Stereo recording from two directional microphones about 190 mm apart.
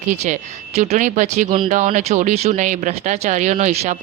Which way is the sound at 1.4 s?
25° right (ahead or behind).